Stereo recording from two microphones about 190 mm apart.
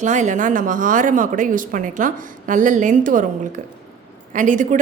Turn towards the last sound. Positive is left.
turn(degrees=-45)  # may be behind; listen again after turning